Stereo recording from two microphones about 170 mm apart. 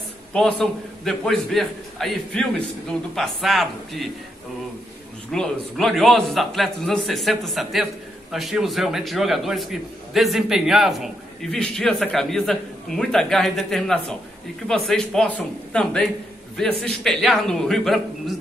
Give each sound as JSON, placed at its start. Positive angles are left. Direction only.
{"t": 0.3, "sound": "a man's voice", "side_deg": 5}
{"t": 5.3, "sound": "a man's voice", "side_deg": 0}